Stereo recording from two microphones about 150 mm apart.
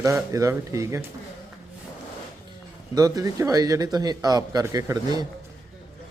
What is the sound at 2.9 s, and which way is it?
Speech, 25° right (ahead or behind).